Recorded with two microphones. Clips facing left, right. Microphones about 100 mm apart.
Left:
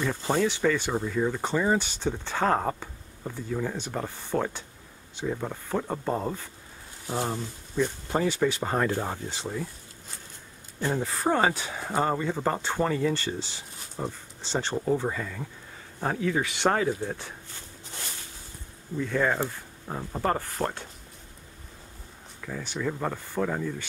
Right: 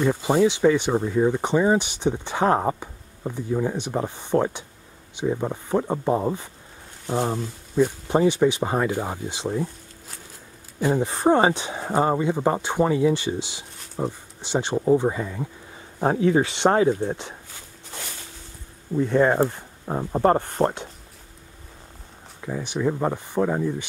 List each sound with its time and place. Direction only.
0.0 s speech: 10° right (ahead or behind)
7.1 s speech: 5° right (ahead or behind)
7.7 s speech: 20° right (ahead or behind)
10.8 s speech: 15° right (ahead or behind)
18.9 s speech: 25° right (ahead or behind)
22.4 s speech: 20° right (ahead or behind)